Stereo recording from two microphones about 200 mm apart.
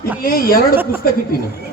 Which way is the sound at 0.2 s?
45° left (ahead or behind).